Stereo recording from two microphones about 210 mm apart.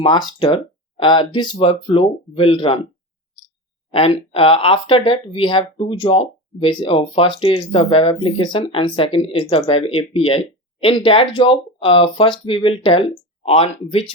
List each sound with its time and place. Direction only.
0.0 s speech: 20° left (ahead or behind)
3.9 s speech: 25° left (ahead or behind)